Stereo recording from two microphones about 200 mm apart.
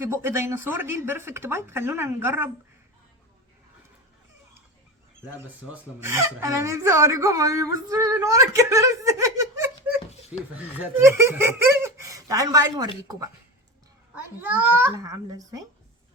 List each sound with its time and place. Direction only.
0.0 s speech: 15° right (ahead or behind)
5.7 s speech: 15° right (ahead or behind)
10.9 s speech: 15° right (ahead or behind)
14.4 s speech: 10° right (ahead or behind)